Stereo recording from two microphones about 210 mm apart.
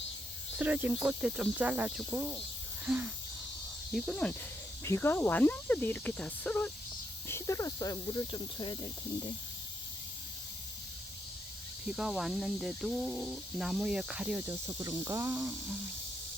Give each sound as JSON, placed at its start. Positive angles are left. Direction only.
{"t": 0.6, "sound": "speech", "side_deg": -10}
{"t": 11.9, "sound": "speech", "side_deg": 0}